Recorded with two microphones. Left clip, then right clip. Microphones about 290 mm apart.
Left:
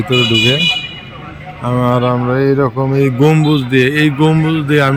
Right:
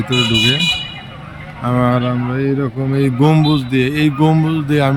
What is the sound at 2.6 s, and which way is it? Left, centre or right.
Speech, centre.